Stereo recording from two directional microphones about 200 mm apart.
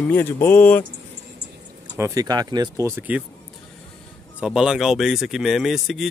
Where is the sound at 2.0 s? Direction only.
15° right (ahead or behind).